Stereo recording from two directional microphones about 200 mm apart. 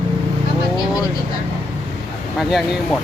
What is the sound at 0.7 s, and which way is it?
Speech, 20° left (ahead or behind).